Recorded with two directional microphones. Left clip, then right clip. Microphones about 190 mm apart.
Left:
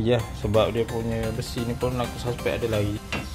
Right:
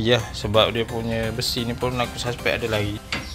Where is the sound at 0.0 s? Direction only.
5° left (ahead or behind).